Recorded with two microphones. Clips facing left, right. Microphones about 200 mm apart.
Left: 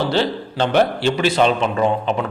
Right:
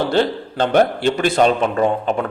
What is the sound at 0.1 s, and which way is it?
Speech, 50° right (ahead or behind).